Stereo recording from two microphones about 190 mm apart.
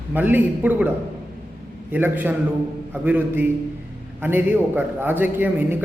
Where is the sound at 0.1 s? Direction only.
10° right (ahead or behind).